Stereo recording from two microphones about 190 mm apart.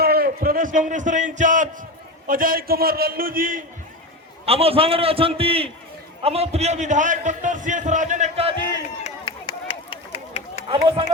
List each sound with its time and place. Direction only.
0.0 s a man's voice: 55° right (ahead or behind)
4.4 s a man's voice: 30° right (ahead or behind)
9.0 s a sound: 25° left (ahead or behind)